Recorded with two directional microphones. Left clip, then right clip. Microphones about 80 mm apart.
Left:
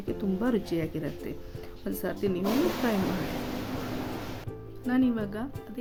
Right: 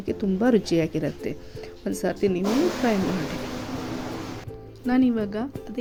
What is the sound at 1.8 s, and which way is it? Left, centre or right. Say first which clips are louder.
Speech: right 6 dB; right.